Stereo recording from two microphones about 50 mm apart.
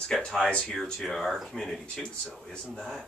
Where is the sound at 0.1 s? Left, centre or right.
Centre.